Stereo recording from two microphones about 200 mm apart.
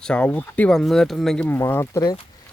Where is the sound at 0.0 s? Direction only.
5° left (ahead or behind).